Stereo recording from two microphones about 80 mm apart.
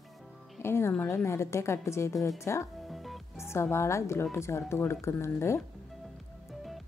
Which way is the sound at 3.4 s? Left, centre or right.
Left.